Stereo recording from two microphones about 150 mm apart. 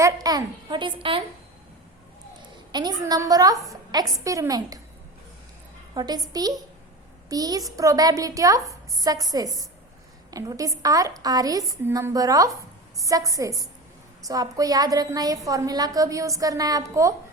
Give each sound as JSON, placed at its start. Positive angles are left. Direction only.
{"t": 0.0, "sound": "a woman's voice", "side_deg": -25}
{"t": 2.4, "sound": "a woman's voice", "side_deg": -30}
{"t": 5.9, "sound": "a woman's voice", "side_deg": -25}